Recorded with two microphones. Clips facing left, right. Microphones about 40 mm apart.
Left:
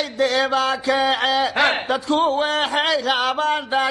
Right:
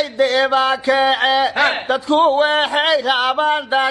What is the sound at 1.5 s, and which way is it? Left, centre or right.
Speech, centre.